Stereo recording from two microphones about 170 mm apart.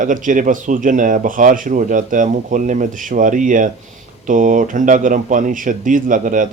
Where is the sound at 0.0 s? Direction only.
50° right (ahead or behind).